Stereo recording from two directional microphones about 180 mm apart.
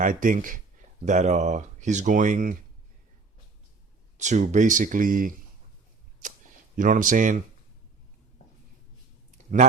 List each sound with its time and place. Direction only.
0.0 s speech: 50° right (ahead or behind)
4.2 s speech: 40° right (ahead or behind)
6.7 s speech: 45° right (ahead or behind)